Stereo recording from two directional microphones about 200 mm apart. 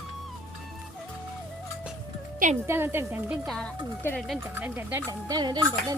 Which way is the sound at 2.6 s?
10° right (ahead or behind).